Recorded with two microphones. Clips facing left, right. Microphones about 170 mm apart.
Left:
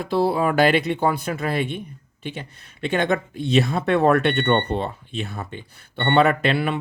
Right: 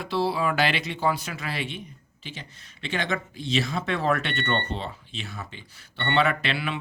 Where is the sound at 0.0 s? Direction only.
50° left (ahead or behind).